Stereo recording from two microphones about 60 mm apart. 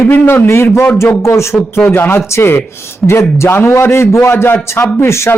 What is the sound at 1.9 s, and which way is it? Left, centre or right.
A man's voice, left.